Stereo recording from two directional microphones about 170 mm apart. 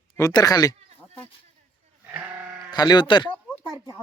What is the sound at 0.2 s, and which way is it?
Speech, 20° left (ahead or behind).